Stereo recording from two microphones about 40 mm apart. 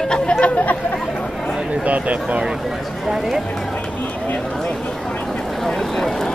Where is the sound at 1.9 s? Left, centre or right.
Right.